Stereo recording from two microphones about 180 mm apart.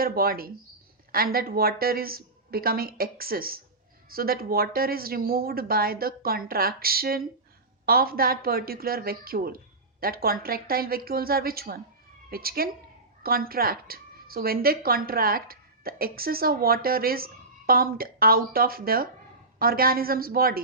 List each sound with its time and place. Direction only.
0.0 s speech: 55° right (ahead or behind)